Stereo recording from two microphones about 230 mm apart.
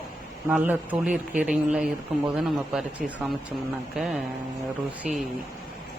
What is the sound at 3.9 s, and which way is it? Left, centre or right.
Speech, centre.